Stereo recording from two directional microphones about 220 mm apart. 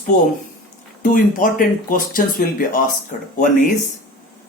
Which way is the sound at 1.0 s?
35° left (ahead or behind).